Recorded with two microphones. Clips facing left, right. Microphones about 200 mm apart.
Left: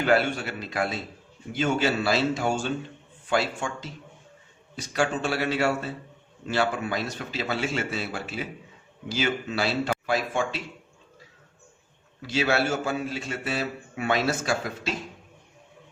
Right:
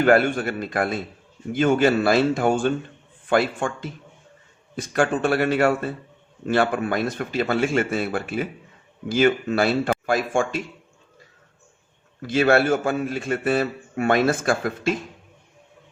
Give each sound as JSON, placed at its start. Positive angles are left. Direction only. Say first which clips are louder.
{"t": 0.0, "sound": "a man's voice", "louder": "right 6 dB", "side_deg": -50}
{"t": 12.2, "sound": "a man's voice", "louder": "right 7 dB", "side_deg": -50}